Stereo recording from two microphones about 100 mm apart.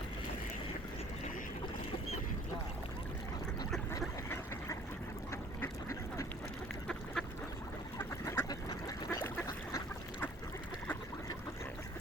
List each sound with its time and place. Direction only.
5.3 s duck: 25° left (ahead or behind)
6.8 s duck: 5° left (ahead or behind)
7.9 s duck: 25° left (ahead or behind)